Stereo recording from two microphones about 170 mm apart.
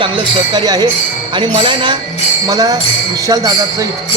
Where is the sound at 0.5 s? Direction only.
20° right (ahead or behind).